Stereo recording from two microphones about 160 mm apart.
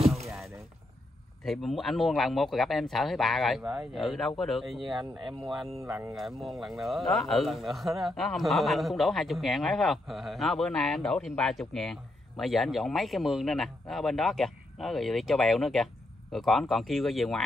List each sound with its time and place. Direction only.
1.4 s a man's voice: centre (ahead or behind)
5.8 s speech: 20° right (ahead or behind)
6.1 s a man's voice: centre (ahead or behind)